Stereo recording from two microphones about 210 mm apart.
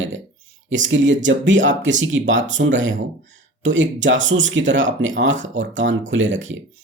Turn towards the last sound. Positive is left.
turn(degrees=-65)  # may be behind; listen again after turning